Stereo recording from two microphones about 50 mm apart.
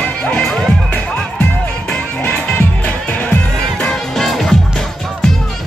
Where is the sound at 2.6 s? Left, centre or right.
Left.